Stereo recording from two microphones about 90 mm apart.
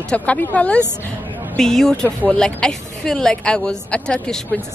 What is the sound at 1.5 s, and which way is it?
Speech, 5° left (ahead or behind).